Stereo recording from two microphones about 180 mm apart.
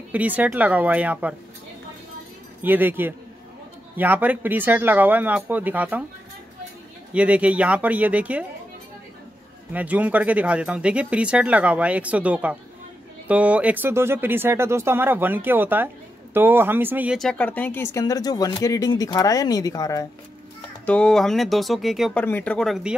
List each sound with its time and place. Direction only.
0.1 s speech: 10° right (ahead or behind)
2.6 s speech: 10° right (ahead or behind)
7.2 s speech: 5° right (ahead or behind)
9.7 s speech: 10° right (ahead or behind)
17.2 s speech: 5° left (ahead or behind)
20.8 s speech: 5° left (ahead or behind)